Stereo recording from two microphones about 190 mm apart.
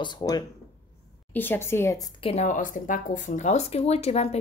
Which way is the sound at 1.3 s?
10° left (ahead or behind).